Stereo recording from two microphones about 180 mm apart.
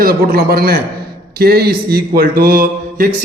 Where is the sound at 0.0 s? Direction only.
60° right (ahead or behind).